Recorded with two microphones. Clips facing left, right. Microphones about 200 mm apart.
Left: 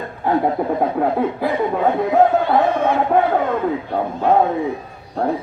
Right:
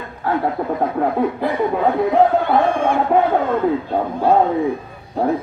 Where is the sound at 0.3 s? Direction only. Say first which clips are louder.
Left 2 dB; 20° left (ahead or behind).